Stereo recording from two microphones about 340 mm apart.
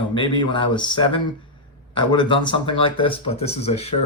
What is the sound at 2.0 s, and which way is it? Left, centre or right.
Speech, centre.